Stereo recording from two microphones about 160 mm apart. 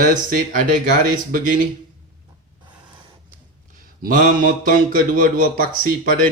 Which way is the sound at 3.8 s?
60° right (ahead or behind).